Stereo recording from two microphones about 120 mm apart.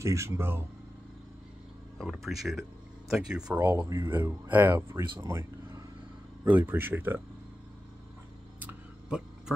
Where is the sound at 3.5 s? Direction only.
20° right (ahead or behind).